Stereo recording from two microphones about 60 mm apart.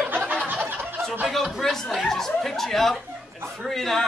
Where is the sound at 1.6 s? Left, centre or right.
Centre.